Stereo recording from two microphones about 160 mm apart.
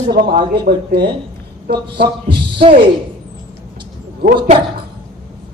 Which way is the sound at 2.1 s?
30° right (ahead or behind).